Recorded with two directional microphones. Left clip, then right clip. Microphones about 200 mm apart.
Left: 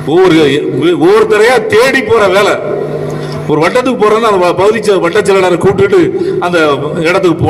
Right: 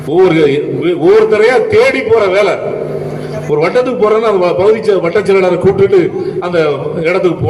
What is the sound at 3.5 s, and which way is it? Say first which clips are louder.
A man's voice: left 2 dB; 60° left (ahead or behind).